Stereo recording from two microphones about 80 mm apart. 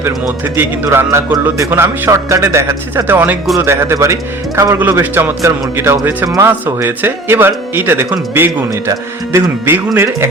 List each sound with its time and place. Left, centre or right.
0.0 s a man's voice: right
4.8 s a man's voice: right
9.3 s a man's voice: right
9.6 s speech: right